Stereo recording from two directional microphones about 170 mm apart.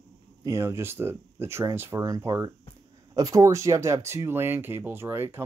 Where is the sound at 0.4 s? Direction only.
15° right (ahead or behind).